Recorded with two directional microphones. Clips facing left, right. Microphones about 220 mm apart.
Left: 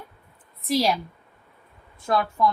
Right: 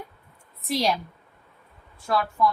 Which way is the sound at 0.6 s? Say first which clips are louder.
Left 3 dB; centre (ahead or behind).